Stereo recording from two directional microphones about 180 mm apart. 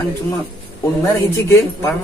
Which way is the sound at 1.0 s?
15° left (ahead or behind).